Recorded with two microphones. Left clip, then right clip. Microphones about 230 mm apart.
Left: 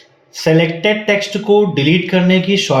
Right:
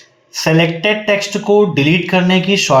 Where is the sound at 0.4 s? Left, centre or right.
Right.